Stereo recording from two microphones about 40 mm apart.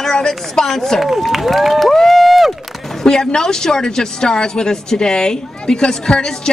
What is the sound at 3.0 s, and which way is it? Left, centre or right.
Speech, centre.